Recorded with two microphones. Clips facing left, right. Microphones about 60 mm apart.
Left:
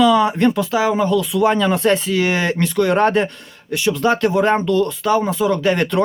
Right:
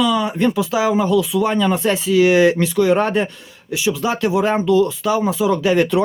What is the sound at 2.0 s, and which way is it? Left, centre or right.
Speech, centre.